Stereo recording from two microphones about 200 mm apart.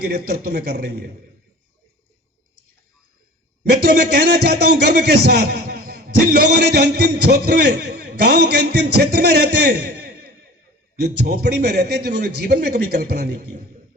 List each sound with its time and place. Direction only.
0.0 s a man's voice: 50° right (ahead or behind)
3.8 s a man's voice: 55° right (ahead or behind)